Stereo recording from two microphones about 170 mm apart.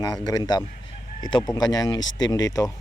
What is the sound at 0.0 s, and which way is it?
Speech, 20° left (ahead or behind).